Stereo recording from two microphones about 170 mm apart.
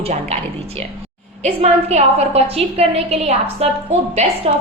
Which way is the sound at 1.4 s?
40° right (ahead or behind).